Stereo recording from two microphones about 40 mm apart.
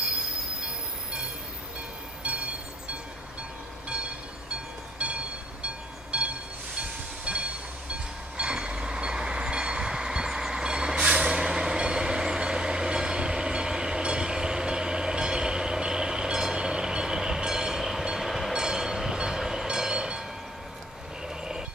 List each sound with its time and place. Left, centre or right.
2.2 s a sound: right
4.9 s train: right
8.4 s vehicle: right
18.5 s train: centre